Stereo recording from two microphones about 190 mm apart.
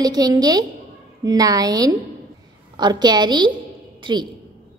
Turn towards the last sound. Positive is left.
turn(degrees=-25)  # may be behind; listen again after turning